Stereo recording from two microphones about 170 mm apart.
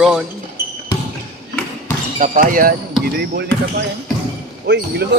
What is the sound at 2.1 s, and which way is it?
Speech, 50° right (ahead or behind).